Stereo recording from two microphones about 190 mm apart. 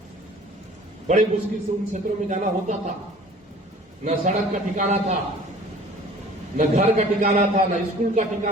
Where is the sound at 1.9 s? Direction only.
40° right (ahead or behind).